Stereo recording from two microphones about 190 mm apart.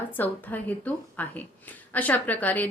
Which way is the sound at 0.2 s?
10° left (ahead or behind).